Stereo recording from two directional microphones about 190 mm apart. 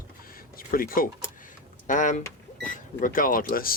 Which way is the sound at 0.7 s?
50° left (ahead or behind).